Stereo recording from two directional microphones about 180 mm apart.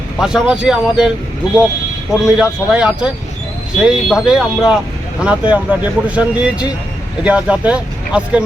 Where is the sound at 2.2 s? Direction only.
5° right (ahead or behind).